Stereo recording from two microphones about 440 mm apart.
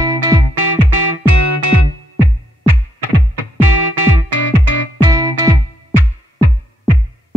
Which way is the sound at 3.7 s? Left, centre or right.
Right.